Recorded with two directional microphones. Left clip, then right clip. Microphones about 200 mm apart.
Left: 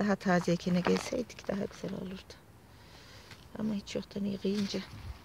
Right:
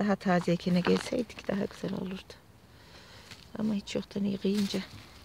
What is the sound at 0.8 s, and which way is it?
Speech, 10° left (ahead or behind).